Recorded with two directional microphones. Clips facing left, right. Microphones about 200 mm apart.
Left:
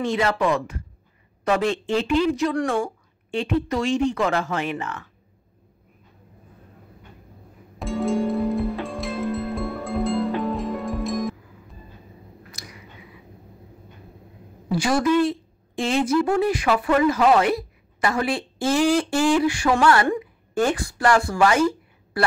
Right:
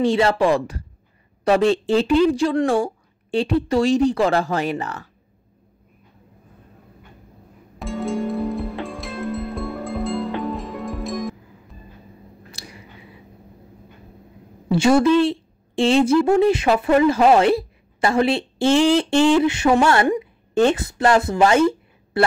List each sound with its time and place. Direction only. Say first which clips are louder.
0.0 s speech: right 5 dB; 30° right (ahead or behind)
7.8 s music: left 2 dB; centre (ahead or behind)
12.4 s squish: right 4 dB; 30° right (ahead or behind)
14.7 s a woman's voice: right 5 dB; 25° right (ahead or behind)